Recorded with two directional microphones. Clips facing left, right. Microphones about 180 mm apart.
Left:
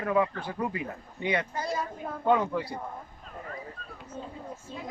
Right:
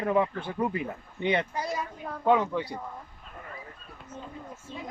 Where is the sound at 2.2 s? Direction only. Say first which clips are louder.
Right 1 dB; centre (ahead or behind).